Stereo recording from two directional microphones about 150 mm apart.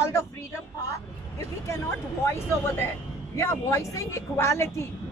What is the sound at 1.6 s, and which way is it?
Speech, 20° left (ahead or behind).